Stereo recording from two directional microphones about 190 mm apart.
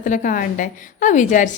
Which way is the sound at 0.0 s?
45° left (ahead or behind).